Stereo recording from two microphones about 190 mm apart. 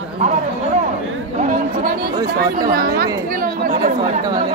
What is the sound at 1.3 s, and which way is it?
A woman's voice, 45° right (ahead or behind).